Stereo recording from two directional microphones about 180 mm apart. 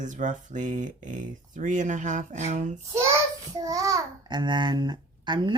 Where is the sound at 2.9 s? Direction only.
15° right (ahead or behind).